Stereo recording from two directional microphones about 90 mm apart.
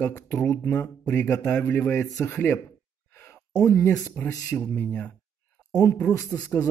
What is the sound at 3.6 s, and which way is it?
Speech, 25° left (ahead or behind).